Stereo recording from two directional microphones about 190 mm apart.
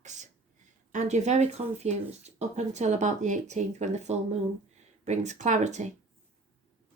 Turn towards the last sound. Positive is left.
turn(degrees=-40)  # may be behind; listen again after turning